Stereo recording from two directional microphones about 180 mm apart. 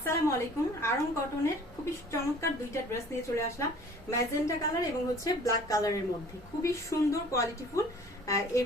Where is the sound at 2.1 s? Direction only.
15° left (ahead or behind).